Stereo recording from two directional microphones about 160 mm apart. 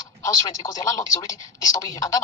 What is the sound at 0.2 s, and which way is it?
Speech, 20° left (ahead or behind).